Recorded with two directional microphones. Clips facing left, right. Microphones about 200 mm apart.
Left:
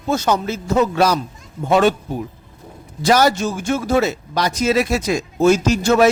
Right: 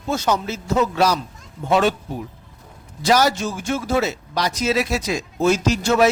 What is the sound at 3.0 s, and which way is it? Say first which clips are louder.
A man's voice: left 3 dB; 50° left (ahead or behind).